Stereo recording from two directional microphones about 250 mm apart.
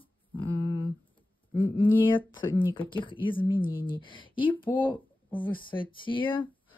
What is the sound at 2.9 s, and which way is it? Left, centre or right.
Speech, centre.